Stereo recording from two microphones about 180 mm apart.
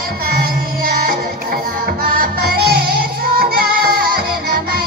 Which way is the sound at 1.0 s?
55° right (ahead or behind).